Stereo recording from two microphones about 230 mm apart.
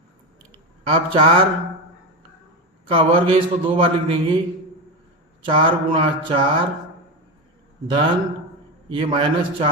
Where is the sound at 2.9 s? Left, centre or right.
Right.